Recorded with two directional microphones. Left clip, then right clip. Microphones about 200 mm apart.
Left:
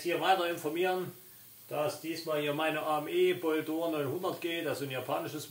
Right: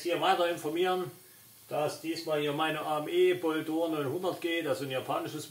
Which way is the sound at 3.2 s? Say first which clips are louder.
Right 2 dB; 10° left (ahead or behind).